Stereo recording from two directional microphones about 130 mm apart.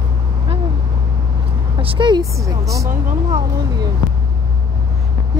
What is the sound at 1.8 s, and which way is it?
Speech, 40° right (ahead or behind).